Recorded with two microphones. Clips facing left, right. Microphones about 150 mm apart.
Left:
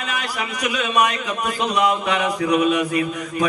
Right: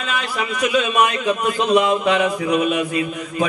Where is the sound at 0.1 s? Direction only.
25° right (ahead or behind).